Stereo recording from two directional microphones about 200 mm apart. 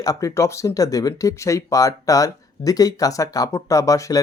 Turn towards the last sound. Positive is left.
turn(degrees=15)  # may be behind; listen again after turning